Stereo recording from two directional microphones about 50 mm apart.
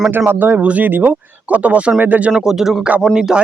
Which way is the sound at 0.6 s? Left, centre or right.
Right.